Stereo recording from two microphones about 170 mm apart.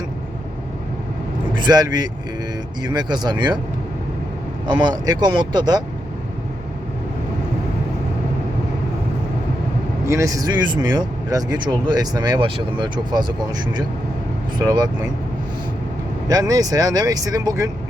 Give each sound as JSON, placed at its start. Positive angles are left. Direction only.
{"t": 1.5, "sound": "speech", "side_deg": -25}
{"t": 4.6, "sound": "speech", "side_deg": -25}
{"t": 10.1, "sound": "speech", "side_deg": -20}
{"t": 16.3, "sound": "speech", "side_deg": -20}